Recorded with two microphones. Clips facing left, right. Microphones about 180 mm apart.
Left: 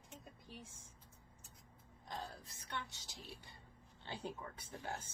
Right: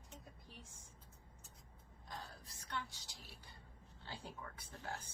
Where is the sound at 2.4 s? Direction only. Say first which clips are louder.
Right 1 dB; 25° left (ahead or behind).